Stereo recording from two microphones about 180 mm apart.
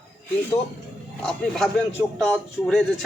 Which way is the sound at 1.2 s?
Centre (ahead or behind).